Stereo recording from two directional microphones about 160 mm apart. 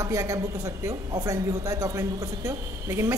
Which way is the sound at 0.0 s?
20° right (ahead or behind).